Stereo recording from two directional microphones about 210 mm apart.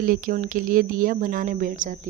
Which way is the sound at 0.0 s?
40° right (ahead or behind).